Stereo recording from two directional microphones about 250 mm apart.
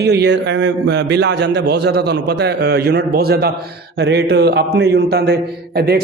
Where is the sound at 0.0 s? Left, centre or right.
Right.